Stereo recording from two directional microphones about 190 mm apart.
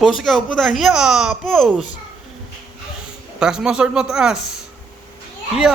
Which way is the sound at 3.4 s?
5° right (ahead or behind).